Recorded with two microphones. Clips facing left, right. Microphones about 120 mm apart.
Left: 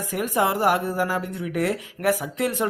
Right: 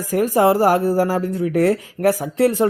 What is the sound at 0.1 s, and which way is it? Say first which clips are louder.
Speech: right 8 dB; 35° right (ahead or behind).